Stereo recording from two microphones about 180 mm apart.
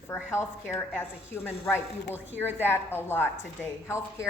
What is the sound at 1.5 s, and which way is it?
A woman's voice, 10° left (ahead or behind).